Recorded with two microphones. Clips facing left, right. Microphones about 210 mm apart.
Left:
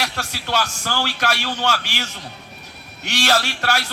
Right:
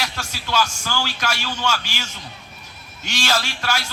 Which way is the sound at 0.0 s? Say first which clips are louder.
Left 2 dB; 65° left (ahead or behind).